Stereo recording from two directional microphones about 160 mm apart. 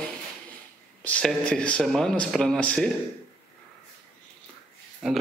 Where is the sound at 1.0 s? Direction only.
5° left (ahead or behind).